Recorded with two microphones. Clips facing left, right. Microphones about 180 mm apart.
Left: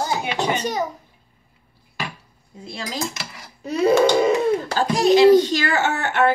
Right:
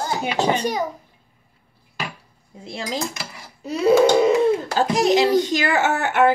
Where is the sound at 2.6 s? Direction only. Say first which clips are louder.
Right 2 dB; 20° right (ahead or behind).